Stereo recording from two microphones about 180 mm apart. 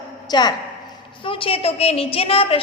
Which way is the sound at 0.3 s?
25° left (ahead or behind).